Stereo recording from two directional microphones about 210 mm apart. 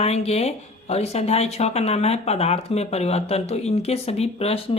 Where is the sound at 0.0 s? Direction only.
30° left (ahead or behind).